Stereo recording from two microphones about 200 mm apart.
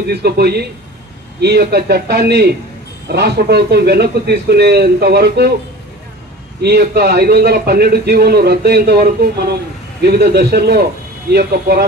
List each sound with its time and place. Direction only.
0.1 s a man's voice: 50° right (ahead or behind)
6.6 s a man's voice: 55° right (ahead or behind)